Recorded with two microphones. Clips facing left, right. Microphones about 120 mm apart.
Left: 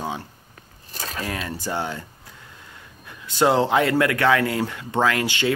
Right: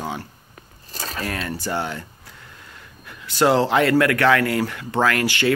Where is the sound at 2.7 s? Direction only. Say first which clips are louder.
Right 1 dB; 20° left (ahead or behind).